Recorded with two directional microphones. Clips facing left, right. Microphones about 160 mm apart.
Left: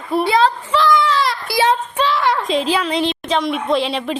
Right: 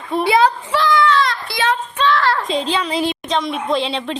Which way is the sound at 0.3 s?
10° right (ahead or behind).